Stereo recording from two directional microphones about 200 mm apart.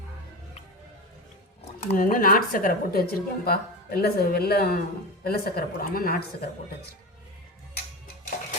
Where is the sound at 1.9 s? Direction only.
45° left (ahead or behind).